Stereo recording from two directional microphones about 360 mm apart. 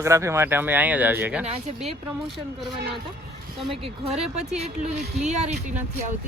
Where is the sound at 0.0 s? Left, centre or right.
Centre.